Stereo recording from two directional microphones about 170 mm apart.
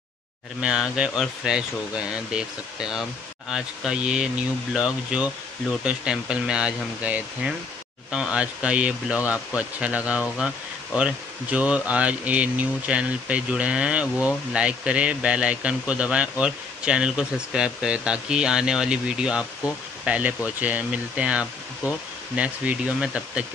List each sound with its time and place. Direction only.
0.6 s speech: 5° right (ahead or behind)